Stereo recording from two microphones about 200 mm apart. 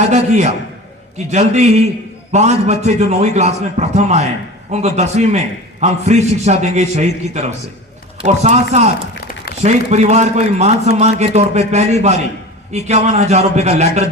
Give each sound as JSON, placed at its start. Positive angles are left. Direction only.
{"t": 0.1, "sound": "a man's voice", "side_deg": -35}
{"t": 9.6, "sound": "a man's voice", "side_deg": -35}